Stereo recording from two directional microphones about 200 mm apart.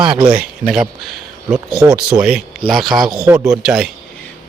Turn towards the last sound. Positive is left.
turn(degrees=0)  # may be behind; listen again after turning